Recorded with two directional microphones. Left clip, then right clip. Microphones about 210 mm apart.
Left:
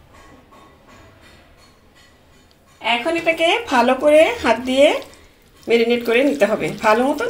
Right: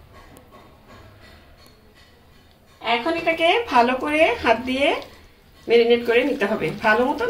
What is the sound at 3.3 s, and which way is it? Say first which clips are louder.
A woman's voice: right 2 dB; 50° left (ahead or behind).